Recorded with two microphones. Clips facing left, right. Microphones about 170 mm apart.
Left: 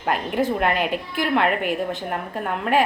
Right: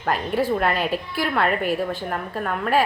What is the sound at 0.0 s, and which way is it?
A woman's voice, 15° left (ahead or behind).